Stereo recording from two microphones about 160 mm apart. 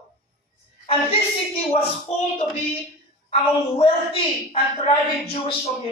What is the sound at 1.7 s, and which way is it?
Speech, 40° left (ahead or behind).